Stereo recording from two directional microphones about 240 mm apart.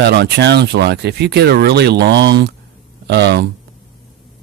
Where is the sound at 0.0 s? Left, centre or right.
Right.